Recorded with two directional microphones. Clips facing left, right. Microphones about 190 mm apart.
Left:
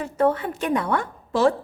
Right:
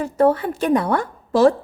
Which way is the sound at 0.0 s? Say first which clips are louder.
Right 4 dB; 35° right (ahead or behind).